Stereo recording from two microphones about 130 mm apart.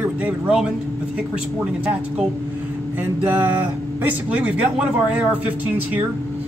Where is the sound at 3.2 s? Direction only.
10° right (ahead or behind).